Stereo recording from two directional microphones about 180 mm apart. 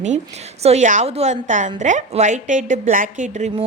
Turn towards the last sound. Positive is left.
turn(degrees=-40)  # may be behind; listen again after turning